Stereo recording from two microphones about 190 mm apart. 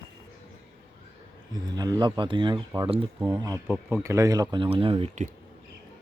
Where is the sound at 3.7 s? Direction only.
10° right (ahead or behind); by 5.3 s 35° right (ahead or behind).